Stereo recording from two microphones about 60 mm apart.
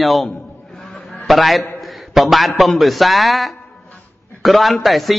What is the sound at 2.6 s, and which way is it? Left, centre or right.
A man's voice, centre.